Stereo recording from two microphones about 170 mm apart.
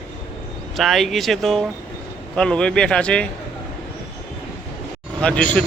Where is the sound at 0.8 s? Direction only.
Centre (ahead or behind).